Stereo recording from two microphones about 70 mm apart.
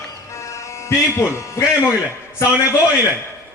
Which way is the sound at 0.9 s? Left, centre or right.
Left.